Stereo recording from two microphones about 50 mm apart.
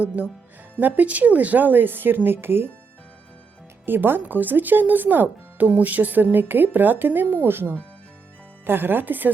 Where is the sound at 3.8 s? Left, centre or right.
Right.